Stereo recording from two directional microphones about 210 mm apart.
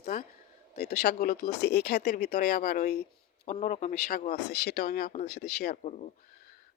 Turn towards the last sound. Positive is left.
turn(degrees=30)  # may be behind; listen again after turning